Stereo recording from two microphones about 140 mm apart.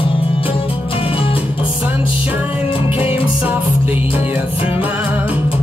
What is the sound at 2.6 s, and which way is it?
Music, 40° left (ahead or behind).